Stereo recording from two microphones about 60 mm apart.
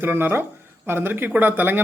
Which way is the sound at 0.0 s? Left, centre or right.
Right.